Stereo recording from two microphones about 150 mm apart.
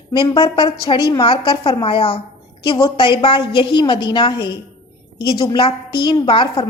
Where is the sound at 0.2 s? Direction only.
30° left (ahead or behind).